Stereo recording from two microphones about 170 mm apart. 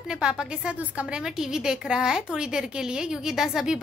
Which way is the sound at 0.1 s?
5° right (ahead or behind).